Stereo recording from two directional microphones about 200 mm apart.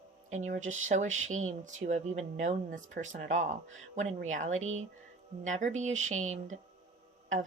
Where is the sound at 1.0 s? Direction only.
80° right.